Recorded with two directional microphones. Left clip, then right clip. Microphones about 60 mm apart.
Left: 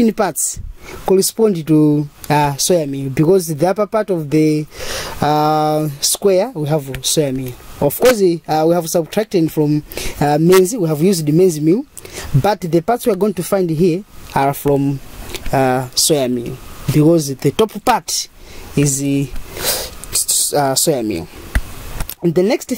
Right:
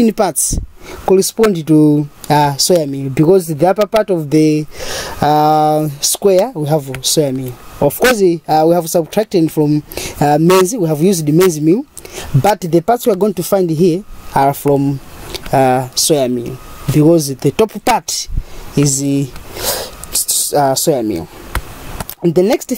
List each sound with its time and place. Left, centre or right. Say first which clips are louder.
0.0 s speech: right 2 dB; right
1.0 s speech: right 3 dB; centre
1.3 s speech: right 2 dB; right
4.3 s speech: right 3 dB; right
7.8 s speech: right 1 dB; right